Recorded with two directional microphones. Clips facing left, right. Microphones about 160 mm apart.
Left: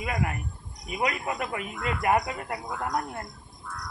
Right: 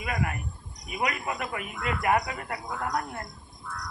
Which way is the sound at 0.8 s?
25° left (ahead or behind).